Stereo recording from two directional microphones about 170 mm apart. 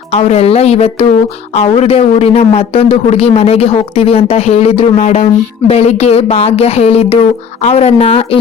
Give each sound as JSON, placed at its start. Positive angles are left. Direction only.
{"t": 0.1, "sound": "speech", "side_deg": 40}